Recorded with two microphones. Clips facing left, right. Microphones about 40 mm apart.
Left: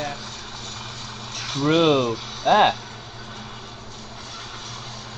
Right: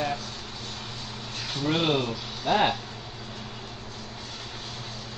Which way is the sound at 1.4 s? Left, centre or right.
Left.